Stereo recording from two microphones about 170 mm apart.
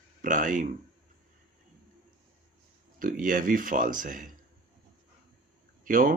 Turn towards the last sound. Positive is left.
turn(degrees=-55)  # may be behind; listen again after turning